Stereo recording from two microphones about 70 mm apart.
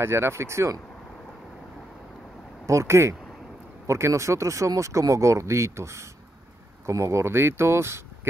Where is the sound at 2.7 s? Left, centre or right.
Right.